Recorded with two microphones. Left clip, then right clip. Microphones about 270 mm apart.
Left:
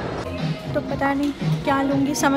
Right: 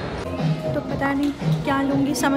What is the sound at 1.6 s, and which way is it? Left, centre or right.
Speech, centre.